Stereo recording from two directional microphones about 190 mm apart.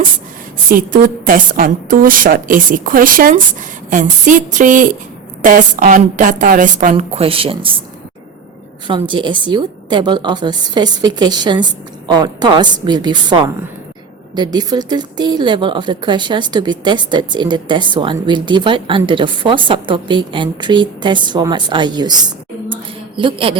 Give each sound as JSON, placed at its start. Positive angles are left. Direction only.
{"t": 0.7, "sound": "a woman's voice", "side_deg": -45}
{"t": 8.9, "sound": "speech", "side_deg": -25}
{"t": 22.7, "sound": "a sound", "side_deg": -25}